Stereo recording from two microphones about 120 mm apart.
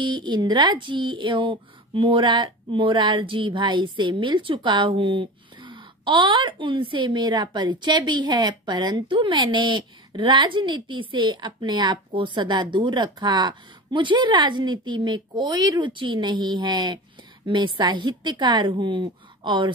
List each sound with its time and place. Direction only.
0.0 s speech: 40° right (ahead or behind)